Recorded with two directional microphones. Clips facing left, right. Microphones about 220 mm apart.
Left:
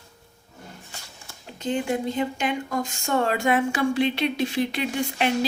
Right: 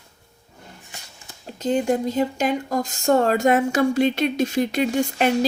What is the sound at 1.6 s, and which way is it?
Speech, 40° right (ahead or behind).